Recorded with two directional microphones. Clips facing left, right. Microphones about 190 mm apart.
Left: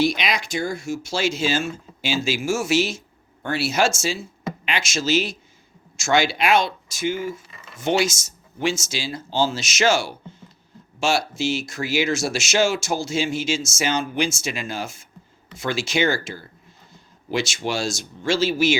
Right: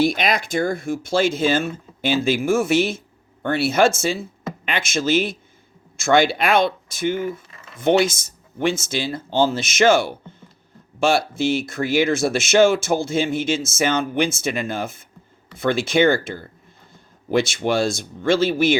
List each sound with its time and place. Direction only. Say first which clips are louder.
0.0 s speech: right 2 dB; 50° right (ahead or behind)